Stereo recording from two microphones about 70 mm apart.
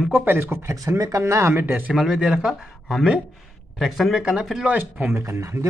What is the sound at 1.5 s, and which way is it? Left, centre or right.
Speech, right.